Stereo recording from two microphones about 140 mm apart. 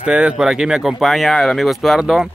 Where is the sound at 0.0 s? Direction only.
10° right (ahead or behind).